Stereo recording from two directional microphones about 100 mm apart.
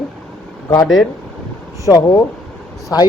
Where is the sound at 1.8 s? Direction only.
35° left (ahead or behind).